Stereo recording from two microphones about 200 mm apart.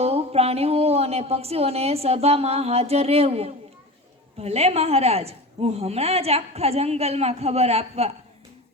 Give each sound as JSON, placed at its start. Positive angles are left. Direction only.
{"t": 0.0, "sound": "a woman's voice", "side_deg": -30}